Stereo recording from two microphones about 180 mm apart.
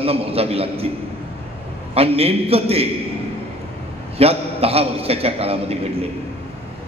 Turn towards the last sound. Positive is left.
turn(degrees=-35)  # may be behind; listen again after turning